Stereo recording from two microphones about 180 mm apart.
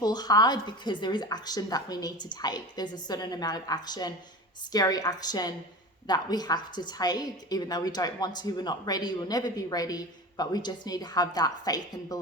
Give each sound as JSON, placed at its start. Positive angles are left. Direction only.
{"t": 0.0, "sound": "a woman's voice", "side_deg": 20}